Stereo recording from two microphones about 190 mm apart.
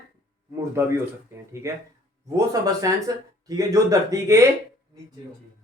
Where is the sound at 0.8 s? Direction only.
15° right (ahead or behind).